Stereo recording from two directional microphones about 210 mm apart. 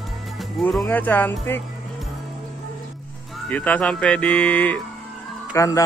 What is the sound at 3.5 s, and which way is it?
Speech, 5° left (ahead or behind).